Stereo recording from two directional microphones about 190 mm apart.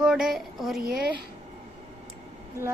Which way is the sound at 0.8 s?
50° right (ahead or behind).